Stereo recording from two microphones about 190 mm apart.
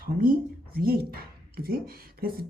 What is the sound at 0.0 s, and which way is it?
Speech, 50° right (ahead or behind).